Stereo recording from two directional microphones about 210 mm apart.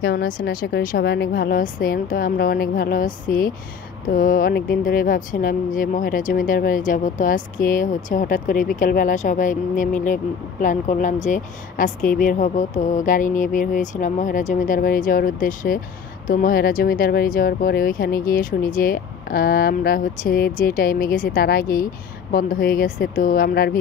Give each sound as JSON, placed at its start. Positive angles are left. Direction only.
{"t": 0.0, "sound": "speech", "side_deg": 50}